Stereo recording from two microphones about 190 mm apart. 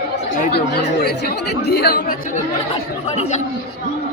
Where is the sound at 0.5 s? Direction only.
55° left (ahead or behind).